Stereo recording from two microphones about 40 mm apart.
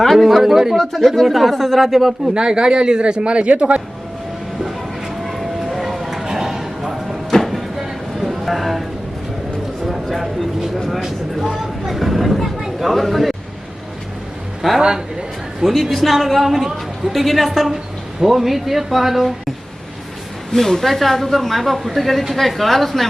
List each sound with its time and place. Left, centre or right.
0.2 s a woman's voice: centre
0.8 s a woman's voice: centre
2.3 s a man's voice: centre
5.2 s a sound: centre
7.3 s a sound: centre
9.8 s a sound: centre
14.8 s a man's voice: centre
15.6 s a woman's voice: centre
20.5 s a woman's voice: centre